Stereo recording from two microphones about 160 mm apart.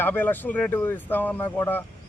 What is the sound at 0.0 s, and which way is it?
Speech, 10° left (ahead or behind).